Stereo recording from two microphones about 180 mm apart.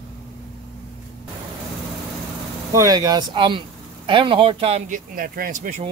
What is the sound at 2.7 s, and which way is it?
Speech, 20° right (ahead or behind).